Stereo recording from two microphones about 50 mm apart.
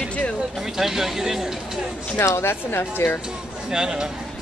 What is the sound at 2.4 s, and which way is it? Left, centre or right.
Speech, left.